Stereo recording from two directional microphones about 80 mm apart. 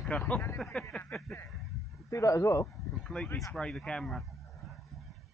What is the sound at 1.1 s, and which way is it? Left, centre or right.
Speech, centre.